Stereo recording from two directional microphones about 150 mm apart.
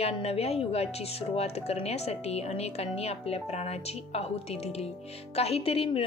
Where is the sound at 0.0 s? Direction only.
40° left (ahead or behind).